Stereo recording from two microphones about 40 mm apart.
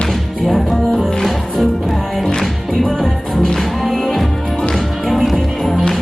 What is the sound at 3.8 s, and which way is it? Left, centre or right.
Music, centre.